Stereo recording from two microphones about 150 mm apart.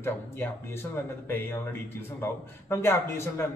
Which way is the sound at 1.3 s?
15° left (ahead or behind).